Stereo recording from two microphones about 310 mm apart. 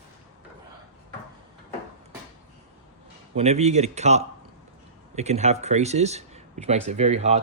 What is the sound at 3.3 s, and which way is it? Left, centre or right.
Speech, right.